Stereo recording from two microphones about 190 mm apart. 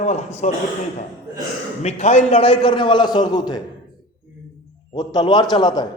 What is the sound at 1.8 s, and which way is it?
A man's voice, 35° left (ahead or behind).